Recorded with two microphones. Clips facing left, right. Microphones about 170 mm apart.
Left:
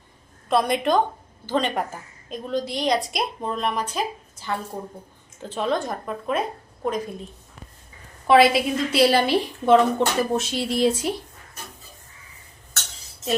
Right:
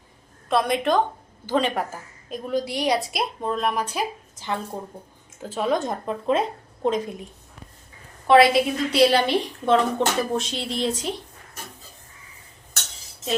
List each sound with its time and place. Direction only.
0.4 s a woman's voice: centre (ahead or behind)
4.4 s a woman's voice: 20° right (ahead or behind)
5.4 s a woman's voice: 10° right (ahead or behind)
5.8 s speech: 25° right (ahead or behind)
8.3 s a woman's voice: centre (ahead or behind)